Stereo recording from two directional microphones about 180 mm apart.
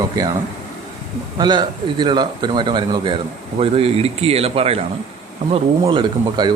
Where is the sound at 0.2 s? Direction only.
20° right (ahead or behind).